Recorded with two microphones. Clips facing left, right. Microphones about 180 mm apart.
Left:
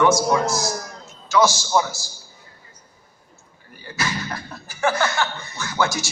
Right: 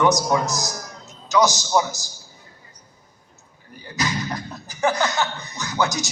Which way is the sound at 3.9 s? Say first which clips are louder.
Right 2 dB; 20° right (ahead or behind).